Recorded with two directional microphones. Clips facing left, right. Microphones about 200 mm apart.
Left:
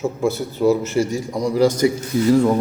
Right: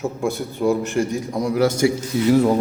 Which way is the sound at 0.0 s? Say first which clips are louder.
Left 3 dB; centre (ahead or behind).